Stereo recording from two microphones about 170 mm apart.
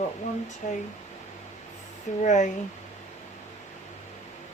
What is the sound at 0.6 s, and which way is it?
Speech, 55° left (ahead or behind).